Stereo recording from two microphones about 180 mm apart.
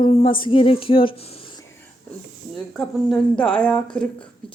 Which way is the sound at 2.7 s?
Centre (ahead or behind).